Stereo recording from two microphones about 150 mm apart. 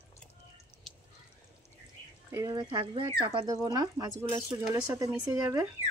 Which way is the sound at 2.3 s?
25° right (ahead or behind).